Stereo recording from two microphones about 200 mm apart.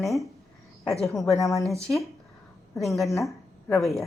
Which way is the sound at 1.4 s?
15° left (ahead or behind).